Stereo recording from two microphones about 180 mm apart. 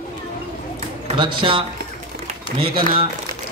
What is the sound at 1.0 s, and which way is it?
Speech, 25° right (ahead or behind).